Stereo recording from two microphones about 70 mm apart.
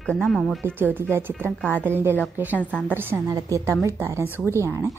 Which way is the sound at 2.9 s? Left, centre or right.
Right.